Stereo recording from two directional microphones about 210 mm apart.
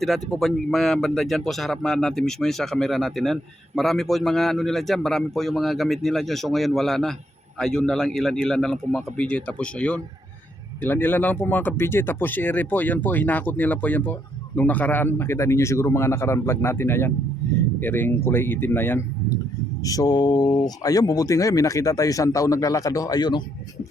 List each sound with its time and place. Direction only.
0.0 s speech: centre (ahead or behind)
19.8 s mantra: 15° left (ahead or behind)
20.7 s speech: 15° left (ahead or behind)